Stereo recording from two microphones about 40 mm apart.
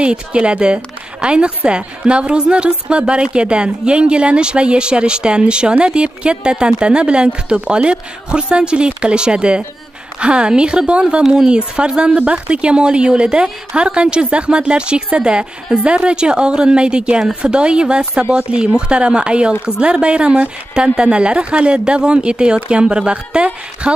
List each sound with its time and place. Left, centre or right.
0.0 s a woman's voice: right